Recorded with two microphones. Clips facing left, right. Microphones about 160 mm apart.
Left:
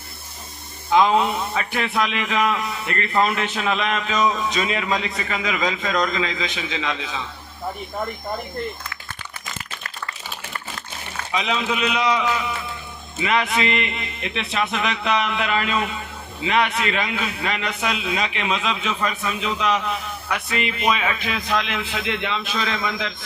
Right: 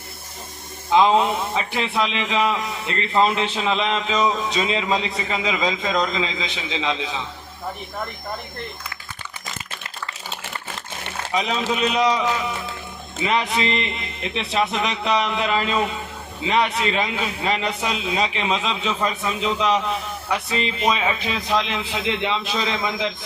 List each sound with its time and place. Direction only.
0.9 s a man's voice: 25° right (ahead or behind)
11.3 s a man's voice: 40° right (ahead or behind)
13.2 s a man's voice: 30° right (ahead or behind)